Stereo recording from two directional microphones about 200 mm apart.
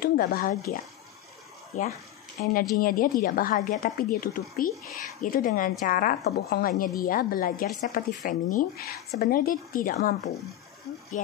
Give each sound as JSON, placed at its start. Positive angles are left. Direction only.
{"t": 0.0, "sound": "speech", "side_deg": 50}